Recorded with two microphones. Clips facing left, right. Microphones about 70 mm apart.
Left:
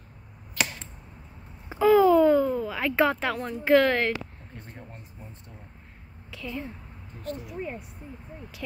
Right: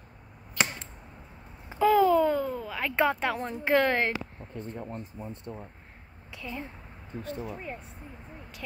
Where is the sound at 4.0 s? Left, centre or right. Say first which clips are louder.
Left 2 dB; centre.